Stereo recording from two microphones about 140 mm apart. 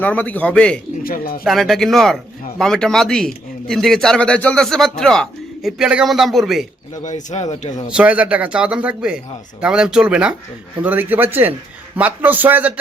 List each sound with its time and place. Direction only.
0.0 s a man's voice: 10° left (ahead or behind)
1.0 s speech: 90° left
1.5 s a man's voice: centre (ahead or behind)
6.9 s speech: 60° left (ahead or behind)
7.9 s speech: 10° right (ahead or behind)